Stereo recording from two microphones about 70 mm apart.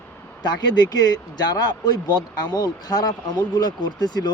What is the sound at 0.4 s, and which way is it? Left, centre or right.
Speech, left.